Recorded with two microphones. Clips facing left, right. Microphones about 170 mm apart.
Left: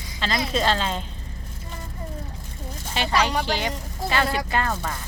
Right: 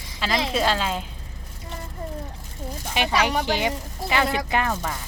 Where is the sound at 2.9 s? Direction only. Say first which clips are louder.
Even; 15° right (ahead or behind).